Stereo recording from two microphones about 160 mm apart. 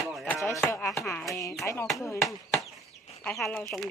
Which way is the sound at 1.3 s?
20° left (ahead or behind).